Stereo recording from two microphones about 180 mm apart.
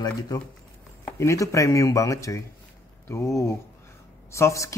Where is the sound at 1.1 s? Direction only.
15° left (ahead or behind).